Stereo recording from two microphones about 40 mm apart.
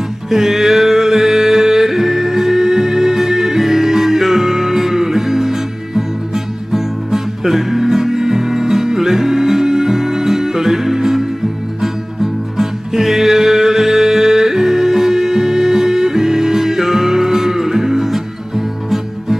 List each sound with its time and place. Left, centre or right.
0.3 s music: centre